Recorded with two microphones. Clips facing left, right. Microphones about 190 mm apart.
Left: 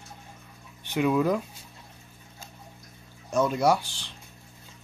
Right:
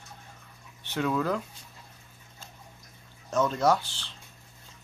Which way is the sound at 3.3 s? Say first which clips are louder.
Left 2 dB; 10° left (ahead or behind).